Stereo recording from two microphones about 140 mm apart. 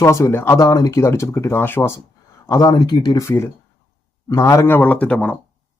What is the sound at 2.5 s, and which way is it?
Speech, 30° left (ahead or behind).